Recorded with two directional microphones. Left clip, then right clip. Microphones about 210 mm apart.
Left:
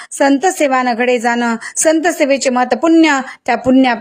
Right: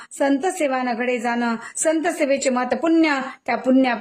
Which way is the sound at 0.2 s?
25° left (ahead or behind).